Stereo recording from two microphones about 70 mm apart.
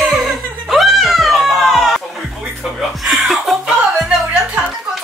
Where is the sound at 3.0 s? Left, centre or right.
Centre.